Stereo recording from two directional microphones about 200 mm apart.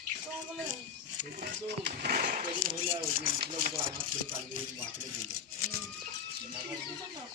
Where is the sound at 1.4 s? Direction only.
55° right (ahead or behind).